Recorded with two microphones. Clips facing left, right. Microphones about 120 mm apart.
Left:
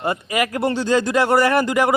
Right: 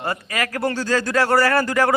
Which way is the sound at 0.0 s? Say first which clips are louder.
Left 4 dB; 20° left (ahead or behind).